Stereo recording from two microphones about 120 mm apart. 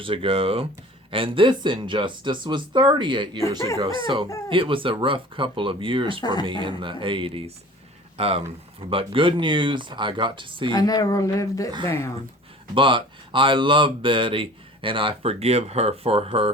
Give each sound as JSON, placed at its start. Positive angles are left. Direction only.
{"t": 0.0, "sound": "speech", "side_deg": -45}
{"t": 10.8, "sound": "speech", "side_deg": 30}
{"t": 12.7, "sound": "speech", "side_deg": -45}